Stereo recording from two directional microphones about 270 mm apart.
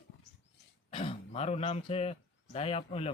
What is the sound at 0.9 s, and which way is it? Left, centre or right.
Speech, left.